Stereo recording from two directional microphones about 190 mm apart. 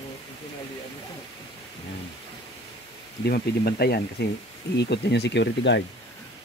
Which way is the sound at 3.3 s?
55° left (ahead or behind).